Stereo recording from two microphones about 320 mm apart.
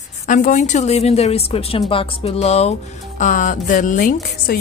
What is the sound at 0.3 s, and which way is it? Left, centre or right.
Speech, left.